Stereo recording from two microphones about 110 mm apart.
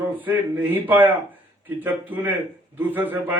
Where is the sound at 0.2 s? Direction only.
15° right (ahead or behind).